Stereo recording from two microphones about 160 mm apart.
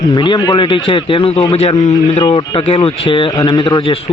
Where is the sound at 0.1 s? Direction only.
25° left (ahead or behind).